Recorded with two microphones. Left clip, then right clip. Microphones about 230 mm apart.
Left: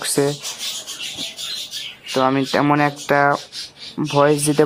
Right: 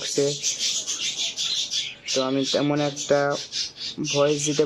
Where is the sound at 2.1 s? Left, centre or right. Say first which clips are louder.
Left 6 dB; centre.